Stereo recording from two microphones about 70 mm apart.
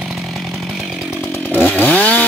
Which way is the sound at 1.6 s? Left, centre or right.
Left.